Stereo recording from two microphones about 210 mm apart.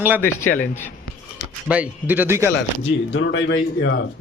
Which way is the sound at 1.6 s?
5° right (ahead or behind).